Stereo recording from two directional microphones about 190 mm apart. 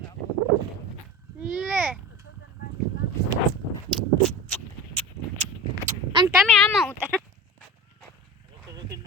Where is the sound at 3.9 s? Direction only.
5° left (ahead or behind).